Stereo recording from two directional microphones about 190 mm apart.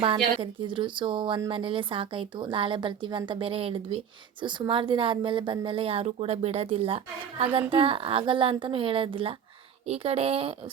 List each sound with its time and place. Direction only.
0.0 s a woman's voice: 30° right (ahead or behind)